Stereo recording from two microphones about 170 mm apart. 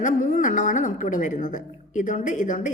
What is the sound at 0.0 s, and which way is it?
A woman's voice, 50° left (ahead or behind).